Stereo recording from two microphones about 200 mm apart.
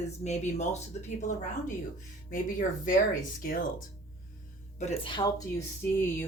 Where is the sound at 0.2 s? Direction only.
35° left (ahead or behind).